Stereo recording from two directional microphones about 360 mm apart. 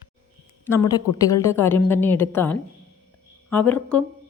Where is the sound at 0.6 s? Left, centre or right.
Centre.